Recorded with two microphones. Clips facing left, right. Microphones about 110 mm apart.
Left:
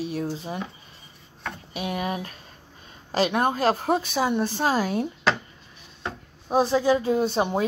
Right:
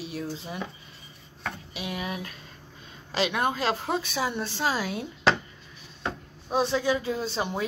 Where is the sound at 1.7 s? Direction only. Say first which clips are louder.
Left 7 dB; 45° left (ahead or behind).